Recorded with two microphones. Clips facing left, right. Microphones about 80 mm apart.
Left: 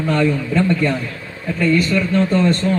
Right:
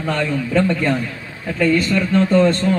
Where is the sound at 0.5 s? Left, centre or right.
Right.